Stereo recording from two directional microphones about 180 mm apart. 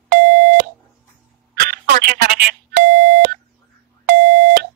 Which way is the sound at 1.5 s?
55° right (ahead or behind).